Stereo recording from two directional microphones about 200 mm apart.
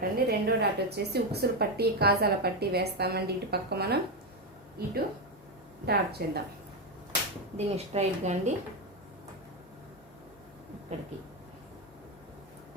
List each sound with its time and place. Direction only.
0.0 s a woman's voice: 50° right (ahead or behind)
5.8 s a woman's voice: 50° right (ahead or behind)
7.5 s a woman's voice: 35° right (ahead or behind)
10.9 s a woman's voice: 35° right (ahead or behind)